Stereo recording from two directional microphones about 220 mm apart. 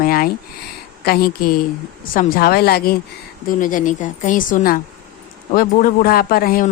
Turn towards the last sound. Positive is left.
turn(degrees=40)  # may be behind; listen again after turning